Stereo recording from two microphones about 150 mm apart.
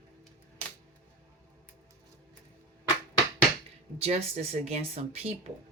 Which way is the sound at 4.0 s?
45° right (ahead or behind).